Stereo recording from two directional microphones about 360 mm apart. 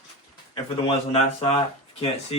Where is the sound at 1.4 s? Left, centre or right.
Centre.